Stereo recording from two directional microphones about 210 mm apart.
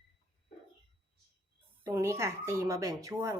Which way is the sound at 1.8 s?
10° right (ahead or behind).